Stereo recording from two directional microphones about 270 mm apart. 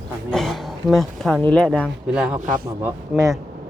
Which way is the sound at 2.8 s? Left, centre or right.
Centre.